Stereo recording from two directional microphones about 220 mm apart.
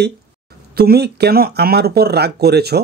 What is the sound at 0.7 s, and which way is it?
Speech, 45° right (ahead or behind).